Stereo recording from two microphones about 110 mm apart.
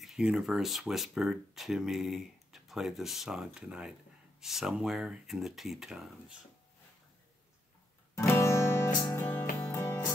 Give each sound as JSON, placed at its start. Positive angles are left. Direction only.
{"t": 0.0, "sound": "speech", "side_deg": -5}
{"t": 8.1, "sound": "music", "side_deg": 25}